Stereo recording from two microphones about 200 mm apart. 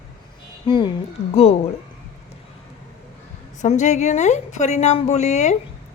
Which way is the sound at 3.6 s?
35° left (ahead or behind).